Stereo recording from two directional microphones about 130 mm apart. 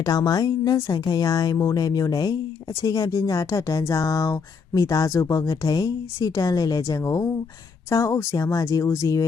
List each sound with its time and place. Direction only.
0.0 s speech: 30° left (ahead or behind)